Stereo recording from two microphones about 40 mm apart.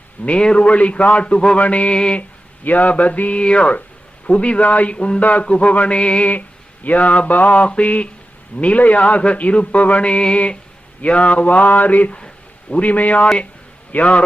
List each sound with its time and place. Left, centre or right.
0.3 s a man's voice: left
1.5 s a man's voice: left
2.6 s speech: left
2.9 s a man's voice: left